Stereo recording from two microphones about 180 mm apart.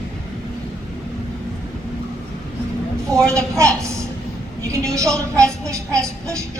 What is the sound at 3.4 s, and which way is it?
A woman's voice, 15° right (ahead or behind).